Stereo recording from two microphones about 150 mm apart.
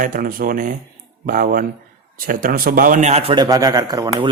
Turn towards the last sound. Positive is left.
turn(degrees=-25)  # may be behind; listen again after turning